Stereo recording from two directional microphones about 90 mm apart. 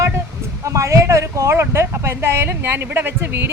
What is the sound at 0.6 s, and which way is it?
Speech, 35° right (ahead or behind).